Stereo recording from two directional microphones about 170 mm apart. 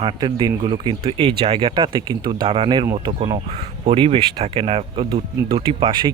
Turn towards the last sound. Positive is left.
turn(degrees=-25)  # may be behind; listen again after turning